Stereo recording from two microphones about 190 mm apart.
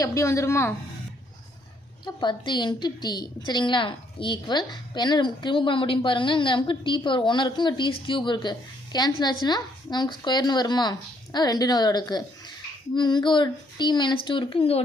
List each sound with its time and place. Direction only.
0.0 s a woman's voice: 15° left (ahead or behind)
2.0 s a woman's voice: 25° left (ahead or behind)